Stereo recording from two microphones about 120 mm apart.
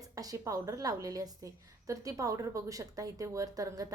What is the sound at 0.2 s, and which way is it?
Speech, 30° right (ahead or behind).